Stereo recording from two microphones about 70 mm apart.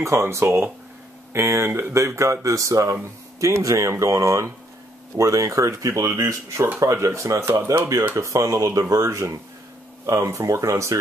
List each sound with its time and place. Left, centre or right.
0.0 s speech: right
2.0 s speech: right